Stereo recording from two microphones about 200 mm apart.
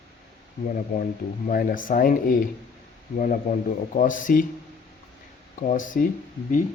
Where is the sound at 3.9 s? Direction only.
40° left (ahead or behind).